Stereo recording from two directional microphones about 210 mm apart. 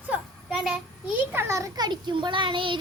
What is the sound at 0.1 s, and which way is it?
Child singing, 5° right (ahead or behind).